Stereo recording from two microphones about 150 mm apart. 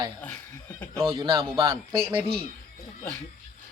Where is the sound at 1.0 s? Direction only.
35° right (ahead or behind).